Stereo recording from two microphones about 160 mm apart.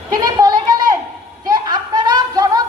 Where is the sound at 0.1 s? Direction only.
25° right (ahead or behind).